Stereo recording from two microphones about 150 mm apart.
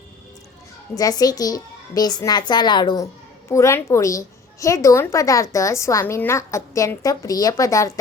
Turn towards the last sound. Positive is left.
turn(degrees=20)  # may be behind; listen again after turning